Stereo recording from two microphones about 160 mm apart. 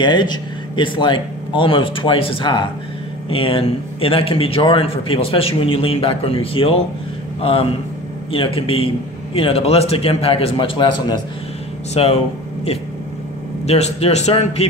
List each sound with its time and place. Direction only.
0.0 s a man's voice: 30° left (ahead or behind)
8.3 s a man's voice: 35° left (ahead or behind)
13.7 s a man's voice: 40° left (ahead or behind)